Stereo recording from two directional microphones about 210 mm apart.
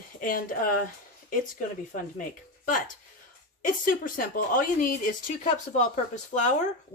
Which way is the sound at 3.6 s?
40° left (ahead or behind).